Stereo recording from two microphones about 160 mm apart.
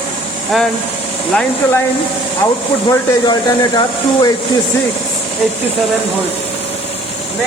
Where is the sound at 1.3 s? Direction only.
15° left (ahead or behind).